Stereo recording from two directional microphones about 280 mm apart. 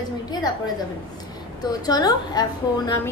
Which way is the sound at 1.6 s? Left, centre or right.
Centre.